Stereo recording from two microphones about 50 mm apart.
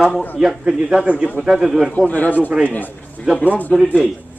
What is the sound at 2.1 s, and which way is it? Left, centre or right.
Speech, left.